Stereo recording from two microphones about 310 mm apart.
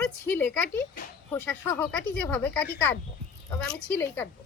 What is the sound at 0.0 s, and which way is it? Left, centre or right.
Speech, centre.